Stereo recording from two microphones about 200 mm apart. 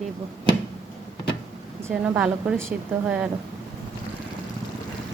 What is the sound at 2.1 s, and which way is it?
Speech, 5° right (ahead or behind).